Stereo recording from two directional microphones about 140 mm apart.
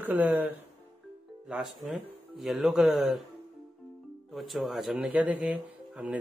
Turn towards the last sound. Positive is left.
turn(degrees=-10)  # may be behind; listen again after turning